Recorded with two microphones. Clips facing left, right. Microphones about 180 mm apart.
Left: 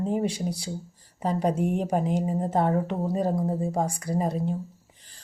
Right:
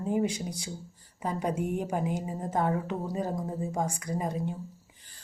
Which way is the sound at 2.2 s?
30° left (ahead or behind).